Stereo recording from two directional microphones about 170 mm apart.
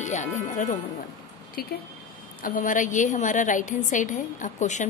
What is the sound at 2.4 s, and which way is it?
A woman's voice, 50° left (ahead or behind).